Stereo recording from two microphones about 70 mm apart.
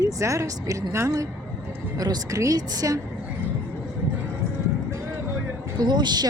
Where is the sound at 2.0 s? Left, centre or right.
Right.